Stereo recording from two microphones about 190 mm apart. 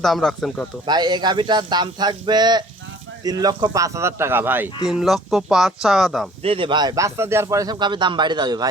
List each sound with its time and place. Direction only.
0.0 s speech: centre (ahead or behind)
0.9 s a man's voice: 20° right (ahead or behind); by 6.2 s centre (ahead or behind)
6.4 s a man's voice: 30° right (ahead or behind)